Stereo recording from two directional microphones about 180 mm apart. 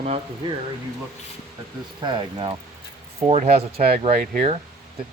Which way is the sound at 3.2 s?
35° right (ahead or behind).